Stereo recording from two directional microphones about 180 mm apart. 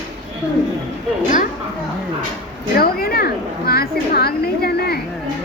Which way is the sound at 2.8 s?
60° left (ahead or behind).